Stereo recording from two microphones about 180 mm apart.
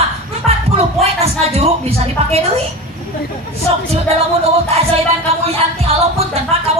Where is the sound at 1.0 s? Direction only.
35° right (ahead or behind).